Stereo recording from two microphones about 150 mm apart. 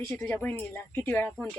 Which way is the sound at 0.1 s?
10° left (ahead or behind).